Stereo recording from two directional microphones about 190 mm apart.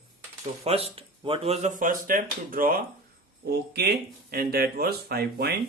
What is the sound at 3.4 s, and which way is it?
Speech, 60° right (ahead or behind).